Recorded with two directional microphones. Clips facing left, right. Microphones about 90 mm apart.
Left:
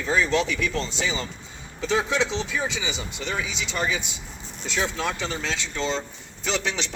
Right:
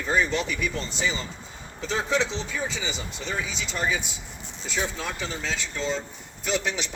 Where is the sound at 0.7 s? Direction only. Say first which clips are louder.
Left 3 dB; 90° left.